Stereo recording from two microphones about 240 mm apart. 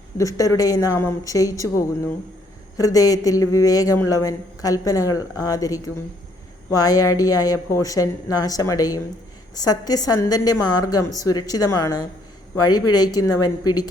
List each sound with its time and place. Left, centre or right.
0.2 s speech: centre
13.3 s a woman's voice: left